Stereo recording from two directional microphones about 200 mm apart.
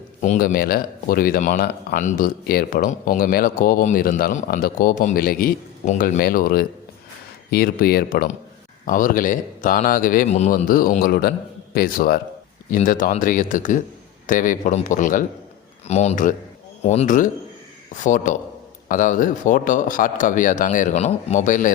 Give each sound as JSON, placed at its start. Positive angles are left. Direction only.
{"t": 0.2, "sound": "speech", "side_deg": 40}